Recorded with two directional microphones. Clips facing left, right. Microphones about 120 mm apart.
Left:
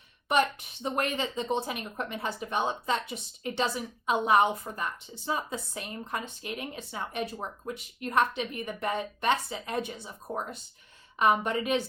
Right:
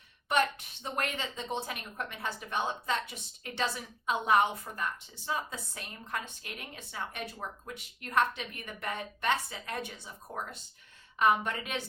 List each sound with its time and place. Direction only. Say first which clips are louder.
0.8 s speech: left 5 dB; 20° left (ahead or behind)